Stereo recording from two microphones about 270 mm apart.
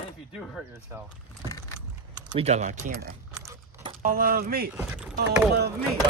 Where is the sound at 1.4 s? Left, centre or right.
Centre.